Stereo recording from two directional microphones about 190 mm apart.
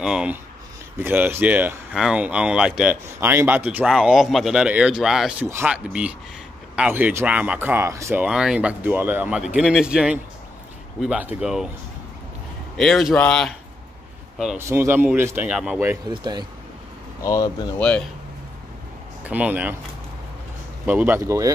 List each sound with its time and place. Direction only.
0.0 s speech: 5° right (ahead or behind)
12.7 s speech: centre (ahead or behind)
14.6 s speech: 15° right (ahead or behind)
16.1 s speech: 20° right (ahead or behind)
17.2 s speech: 20° left (ahead or behind)
17.7 s speech: 5° left (ahead or behind)
19.2 s speech: 5° right (ahead or behind)
20.8 s speech: 10° right (ahead or behind)